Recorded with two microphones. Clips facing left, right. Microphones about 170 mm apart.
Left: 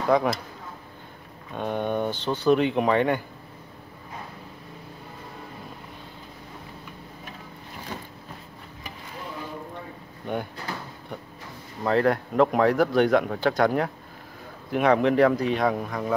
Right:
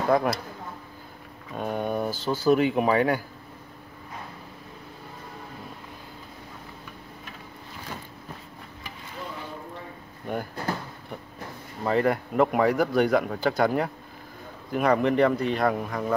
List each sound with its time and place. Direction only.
0.1 s speech: 5° right (ahead or behind)
1.5 s speech: 5° right (ahead or behind)
10.2 s speech: centre (ahead or behind)
11.8 s speech: centre (ahead or behind)